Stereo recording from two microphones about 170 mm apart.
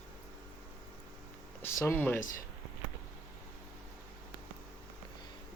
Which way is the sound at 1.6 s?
15° left (ahead or behind).